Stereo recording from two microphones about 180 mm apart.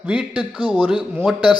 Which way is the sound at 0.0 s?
5° right (ahead or behind).